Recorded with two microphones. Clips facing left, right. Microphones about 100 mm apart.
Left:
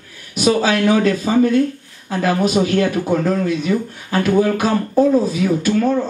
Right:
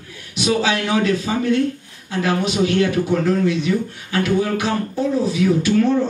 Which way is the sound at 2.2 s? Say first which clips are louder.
Left 3 dB; 40° left (ahead or behind).